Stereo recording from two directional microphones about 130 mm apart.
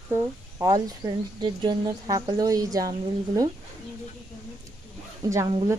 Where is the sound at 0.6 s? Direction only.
30° right (ahead or behind).